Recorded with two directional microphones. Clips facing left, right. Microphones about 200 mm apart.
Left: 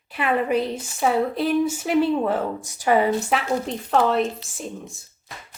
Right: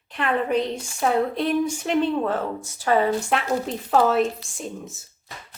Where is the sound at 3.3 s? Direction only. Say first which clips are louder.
Even; centre (ahead or behind).